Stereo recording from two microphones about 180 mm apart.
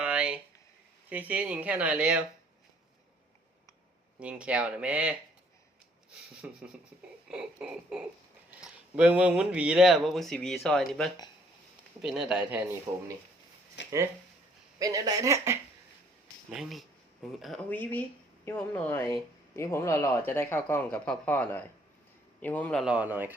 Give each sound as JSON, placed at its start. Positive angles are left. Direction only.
{"t": 0.0, "sound": "a sound", "side_deg": -5}
{"t": 1.1, "sound": "speech", "side_deg": -10}
{"t": 4.2, "sound": "speech", "side_deg": -5}
{"t": 6.4, "sound": "speech", "side_deg": -5}
{"t": 13.8, "sound": "a sound", "side_deg": 80}
{"t": 14.8, "sound": "speech", "side_deg": -20}
{"t": 16.5, "sound": "speech", "side_deg": 0}